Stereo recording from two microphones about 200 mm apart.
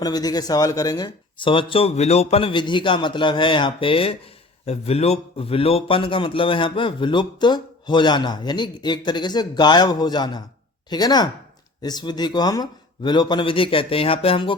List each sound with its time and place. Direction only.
0.0 s a man's voice: 20° left (ahead or behind)